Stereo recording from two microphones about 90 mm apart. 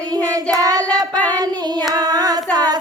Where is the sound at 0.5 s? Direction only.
45° right (ahead or behind).